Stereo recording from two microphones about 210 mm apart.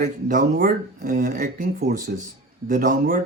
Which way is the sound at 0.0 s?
40° right (ahead or behind).